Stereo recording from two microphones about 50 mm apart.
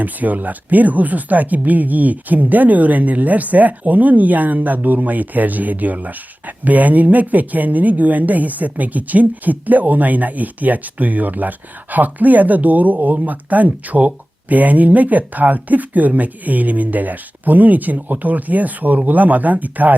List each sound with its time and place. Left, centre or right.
0.0 s speech: right